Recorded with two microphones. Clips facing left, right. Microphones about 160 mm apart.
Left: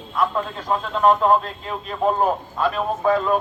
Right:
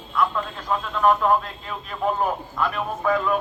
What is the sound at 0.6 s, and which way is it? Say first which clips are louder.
A man's voice: left 2 dB; 30° left (ahead or behind).